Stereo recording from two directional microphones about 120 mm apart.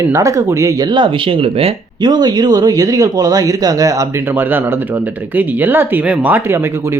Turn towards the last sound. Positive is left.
turn(degrees=-15)  # may be behind; listen again after turning